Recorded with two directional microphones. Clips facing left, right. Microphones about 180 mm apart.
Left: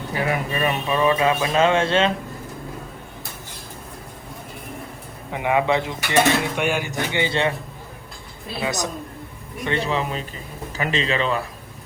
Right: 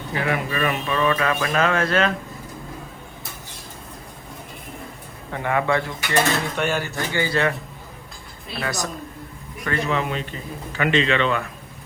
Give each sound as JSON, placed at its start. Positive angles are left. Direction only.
{"t": 0.5, "sound": "speech", "side_deg": 25}
{"t": 5.3, "sound": "speech", "side_deg": 15}
{"t": 8.5, "sound": "speech", "side_deg": 15}
{"t": 9.6, "sound": "speech", "side_deg": 30}